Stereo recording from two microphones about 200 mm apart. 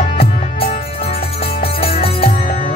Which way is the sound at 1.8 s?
30° left (ahead or behind).